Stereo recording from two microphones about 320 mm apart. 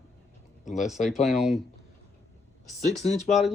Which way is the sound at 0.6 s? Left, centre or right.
Left.